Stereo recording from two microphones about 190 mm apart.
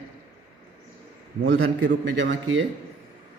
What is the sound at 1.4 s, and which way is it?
Speech, 80° right.